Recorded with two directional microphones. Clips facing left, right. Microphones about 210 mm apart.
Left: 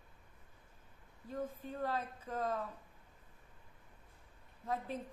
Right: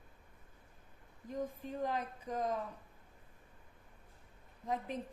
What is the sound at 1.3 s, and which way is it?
A woman's voice, 15° right (ahead or behind).